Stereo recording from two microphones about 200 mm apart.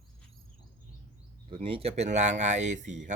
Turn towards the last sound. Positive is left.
turn(degrees=-35)  # may be behind; listen again after turning